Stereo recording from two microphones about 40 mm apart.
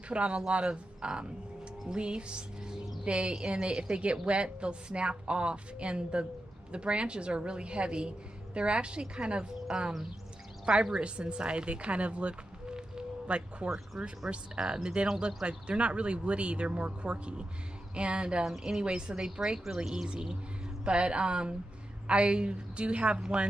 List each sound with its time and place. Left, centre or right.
0.1 s speech: right
1.9 s music: right
3.1 s speech: right
14.0 s speech: centre
14.3 s speech: right
15.4 s speech: right
18.4 s speech: centre; by 23.2 s right